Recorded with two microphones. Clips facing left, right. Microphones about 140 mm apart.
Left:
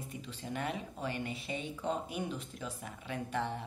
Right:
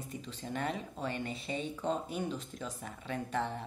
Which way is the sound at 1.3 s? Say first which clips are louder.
Right 2 dB; 35° right (ahead or behind).